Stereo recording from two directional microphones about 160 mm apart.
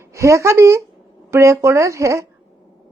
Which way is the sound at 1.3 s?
20° right (ahead or behind).